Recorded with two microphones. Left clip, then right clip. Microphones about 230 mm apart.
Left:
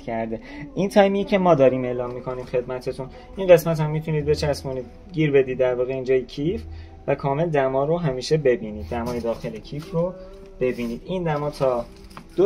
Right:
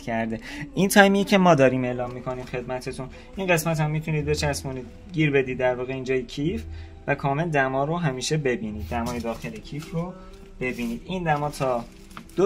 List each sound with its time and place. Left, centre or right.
0.0 s speech: right
11.1 s speech: right